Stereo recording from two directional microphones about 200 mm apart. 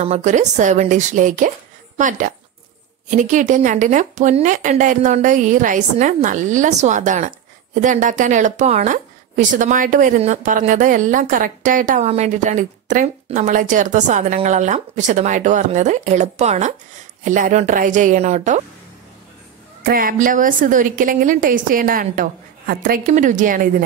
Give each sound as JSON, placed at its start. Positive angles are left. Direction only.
{"t": 0.0, "sound": "a woman's voice", "side_deg": -35}
{"t": 19.8, "sound": "a woman's voice", "side_deg": -45}